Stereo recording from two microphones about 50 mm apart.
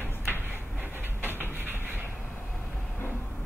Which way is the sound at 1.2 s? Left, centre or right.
Right.